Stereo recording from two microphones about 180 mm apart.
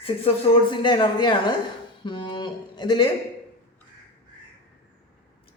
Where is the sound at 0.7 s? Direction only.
25° left (ahead or behind).